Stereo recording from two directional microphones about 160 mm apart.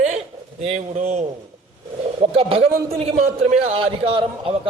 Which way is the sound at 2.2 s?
35° right (ahead or behind).